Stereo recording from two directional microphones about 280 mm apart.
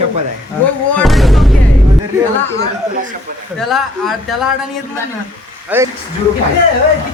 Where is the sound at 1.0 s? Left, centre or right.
Centre.